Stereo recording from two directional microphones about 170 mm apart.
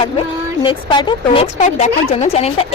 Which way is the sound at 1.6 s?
40° left (ahead or behind).